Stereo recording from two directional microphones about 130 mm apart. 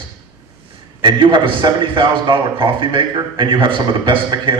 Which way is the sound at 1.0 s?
40° right (ahead or behind).